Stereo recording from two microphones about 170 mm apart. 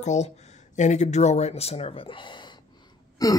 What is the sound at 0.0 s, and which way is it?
Speech, 45° left (ahead or behind).